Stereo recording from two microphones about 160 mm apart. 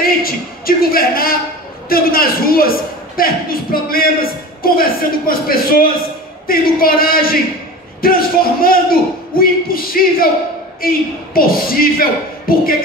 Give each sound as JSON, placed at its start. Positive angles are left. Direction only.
{"t": 0.0, "sound": "a man's voice", "side_deg": 65}